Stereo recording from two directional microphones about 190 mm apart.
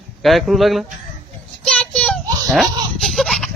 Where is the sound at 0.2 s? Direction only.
Centre (ahead or behind).